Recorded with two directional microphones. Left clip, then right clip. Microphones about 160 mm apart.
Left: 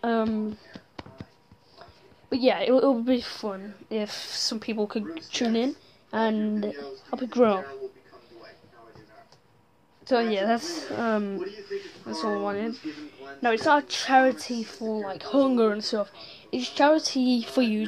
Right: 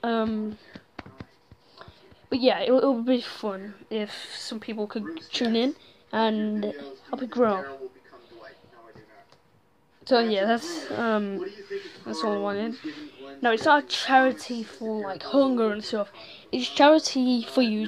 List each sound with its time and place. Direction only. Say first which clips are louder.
0.0 s a sound: left 1 dB; 5° left (ahead or behind)
1.8 s a woman's voice: right 2 dB; 5° right (ahead or behind)
3.9 s speech: left 1 dB; 15° left (ahead or behind)
5.1 s speech: right 4 dB; centre (ahead or behind)
10.0 s speech: right 2 dB; 10° right (ahead or behind)
15.5 s speech: left 2 dB; 15° left (ahead or behind)
15.9 s speech: even; centre (ahead or behind); by 17.2 s 15° right (ahead or behind)
17.2 s speech: right 1 dB; centre (ahead or behind)